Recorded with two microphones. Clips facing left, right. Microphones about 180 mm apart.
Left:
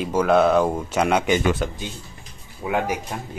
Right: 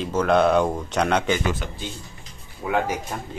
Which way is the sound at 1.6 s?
45° left (ahead or behind).